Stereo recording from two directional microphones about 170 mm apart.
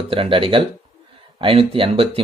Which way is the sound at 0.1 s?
30° right (ahead or behind).